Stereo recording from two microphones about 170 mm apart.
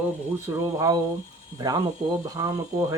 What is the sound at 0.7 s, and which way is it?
Speech, 20° right (ahead or behind).